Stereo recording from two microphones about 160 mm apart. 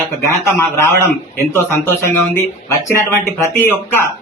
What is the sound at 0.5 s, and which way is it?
Speech, 15° left (ahead or behind).